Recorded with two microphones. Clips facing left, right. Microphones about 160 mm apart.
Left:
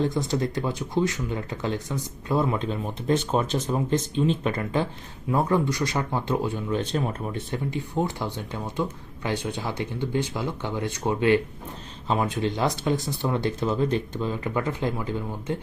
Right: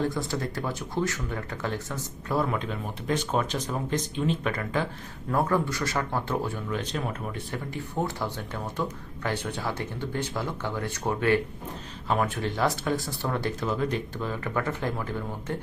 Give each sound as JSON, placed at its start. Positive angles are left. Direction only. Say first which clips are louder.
{"t": 0.1, "sound": "speech", "louder": "left 5 dB", "side_deg": 20}
{"t": 6.7, "sound": "speech", "louder": "left 4 dB", "side_deg": 30}